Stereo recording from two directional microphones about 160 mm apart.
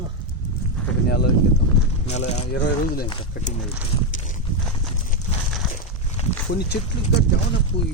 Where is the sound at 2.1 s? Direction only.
45° left (ahead or behind).